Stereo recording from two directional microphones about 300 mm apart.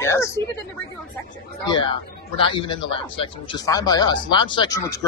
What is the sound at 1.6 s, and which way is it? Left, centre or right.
A man's voice, centre.